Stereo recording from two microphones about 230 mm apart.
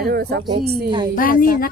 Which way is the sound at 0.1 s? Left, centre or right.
Right.